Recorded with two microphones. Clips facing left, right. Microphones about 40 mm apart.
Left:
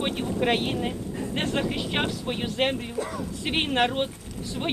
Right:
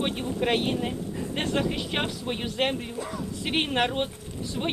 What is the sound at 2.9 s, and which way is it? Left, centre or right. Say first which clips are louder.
Speech: left 3 dB; left.